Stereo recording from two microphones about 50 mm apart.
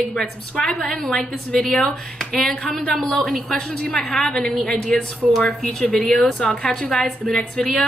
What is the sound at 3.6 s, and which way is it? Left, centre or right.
Speech, left.